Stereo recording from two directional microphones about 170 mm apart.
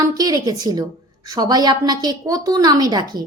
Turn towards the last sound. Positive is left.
turn(degrees=-25)  # may be behind; listen again after turning